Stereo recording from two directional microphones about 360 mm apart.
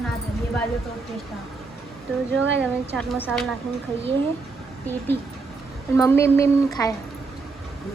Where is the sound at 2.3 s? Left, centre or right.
Right.